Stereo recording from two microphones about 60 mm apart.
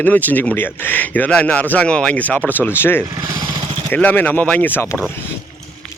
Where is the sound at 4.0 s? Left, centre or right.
Left.